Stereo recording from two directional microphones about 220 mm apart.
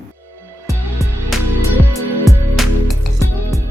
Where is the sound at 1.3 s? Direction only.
Centre (ahead or behind).